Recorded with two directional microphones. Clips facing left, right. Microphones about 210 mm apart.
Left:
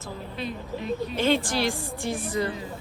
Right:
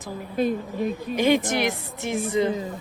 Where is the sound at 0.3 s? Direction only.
50° right (ahead or behind).